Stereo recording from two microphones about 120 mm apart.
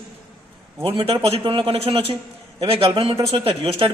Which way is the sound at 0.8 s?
50° right (ahead or behind).